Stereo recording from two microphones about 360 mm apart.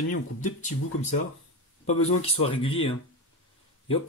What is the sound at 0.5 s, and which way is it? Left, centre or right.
A man's voice, centre.